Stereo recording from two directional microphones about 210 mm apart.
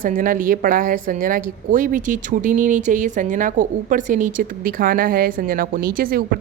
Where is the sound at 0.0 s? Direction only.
40° right (ahead or behind).